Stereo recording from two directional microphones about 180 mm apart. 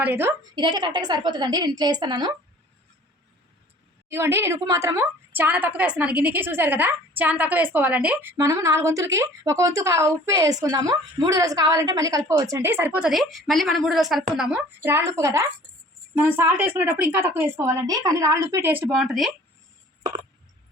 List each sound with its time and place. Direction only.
0.0 s a woman's voice: 10° right (ahead or behind)
0.5 s a woman's voice: 25° right (ahead or behind)
4.1 s a woman's voice: 15° right (ahead or behind)